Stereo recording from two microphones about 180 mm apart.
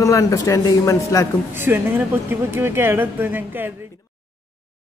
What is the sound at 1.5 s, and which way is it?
Speech, 10° right (ahead or behind).